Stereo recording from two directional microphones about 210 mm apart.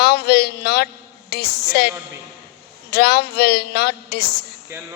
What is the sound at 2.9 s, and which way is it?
A woman's voice, 50° left (ahead or behind).